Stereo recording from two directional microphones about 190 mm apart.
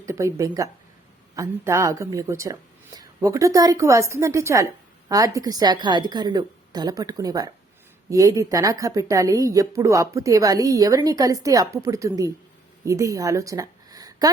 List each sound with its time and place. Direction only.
0.0 s a woman's voice: 15° right (ahead or behind)